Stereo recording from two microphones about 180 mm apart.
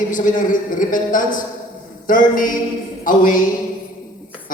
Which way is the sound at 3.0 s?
50° left (ahead or behind).